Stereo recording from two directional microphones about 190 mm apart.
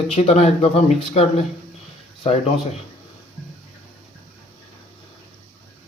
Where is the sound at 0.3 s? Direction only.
30° left (ahead or behind).